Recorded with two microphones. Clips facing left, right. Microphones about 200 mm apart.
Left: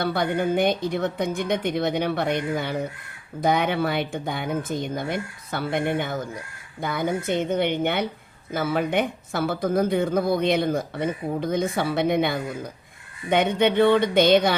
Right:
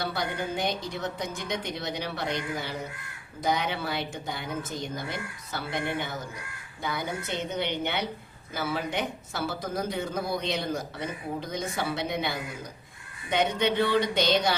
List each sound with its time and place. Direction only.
0.0 s speech: 55° left (ahead or behind)